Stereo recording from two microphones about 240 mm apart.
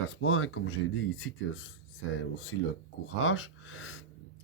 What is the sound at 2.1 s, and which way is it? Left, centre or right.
Speech, left.